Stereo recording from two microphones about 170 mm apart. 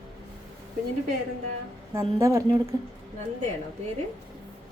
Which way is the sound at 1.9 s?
15° right (ahead or behind).